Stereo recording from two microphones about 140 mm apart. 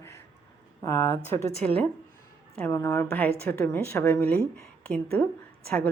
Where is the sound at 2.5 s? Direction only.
15° left (ahead or behind).